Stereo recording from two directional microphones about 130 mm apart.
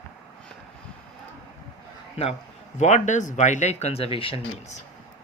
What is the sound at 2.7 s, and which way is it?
Speech, 70° left (ahead or behind).